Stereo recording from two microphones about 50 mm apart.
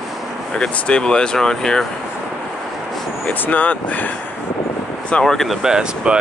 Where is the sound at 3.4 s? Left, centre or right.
Left.